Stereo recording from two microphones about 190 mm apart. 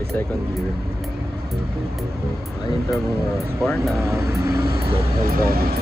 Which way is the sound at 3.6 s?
5° left (ahead or behind).